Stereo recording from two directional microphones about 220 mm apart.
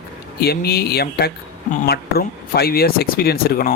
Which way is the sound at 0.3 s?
45° left (ahead or behind).